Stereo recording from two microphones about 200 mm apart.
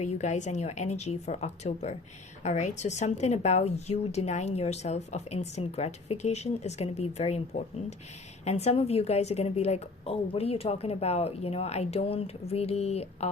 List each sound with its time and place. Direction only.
0.1 s a woman's voice: 35° left (ahead or behind)